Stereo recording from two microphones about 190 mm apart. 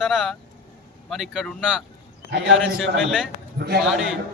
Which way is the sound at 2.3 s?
70° right (ahead or behind).